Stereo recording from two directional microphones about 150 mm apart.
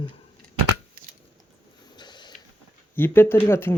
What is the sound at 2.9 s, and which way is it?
Speech, 15° left (ahead or behind).